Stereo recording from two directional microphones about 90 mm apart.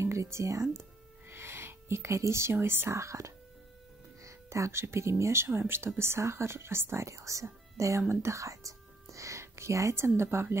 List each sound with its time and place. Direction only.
0.0 s speech: 30° right (ahead or behind)